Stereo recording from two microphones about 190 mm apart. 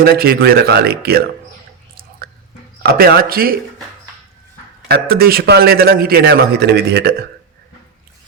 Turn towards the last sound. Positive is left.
turn(degrees=-55)  # may be behind; listen again after turning